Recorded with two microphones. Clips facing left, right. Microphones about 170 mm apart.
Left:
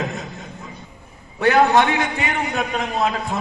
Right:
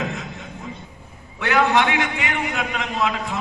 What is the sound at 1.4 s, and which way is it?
A man's voice, 40° left (ahead or behind).